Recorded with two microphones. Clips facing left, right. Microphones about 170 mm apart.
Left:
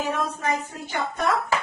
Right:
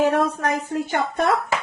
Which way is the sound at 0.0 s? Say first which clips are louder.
Right 7 dB; 65° right (ahead or behind).